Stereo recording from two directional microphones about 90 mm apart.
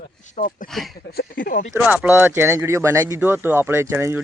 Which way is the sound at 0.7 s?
Centre (ahead or behind).